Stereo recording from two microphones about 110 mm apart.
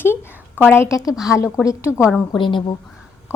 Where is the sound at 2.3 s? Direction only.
45° left (ahead or behind).